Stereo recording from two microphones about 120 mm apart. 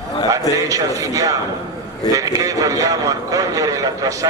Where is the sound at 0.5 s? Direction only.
30° right (ahead or behind).